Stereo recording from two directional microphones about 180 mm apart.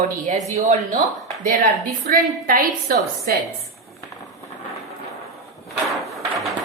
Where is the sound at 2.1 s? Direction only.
50° right (ahead or behind).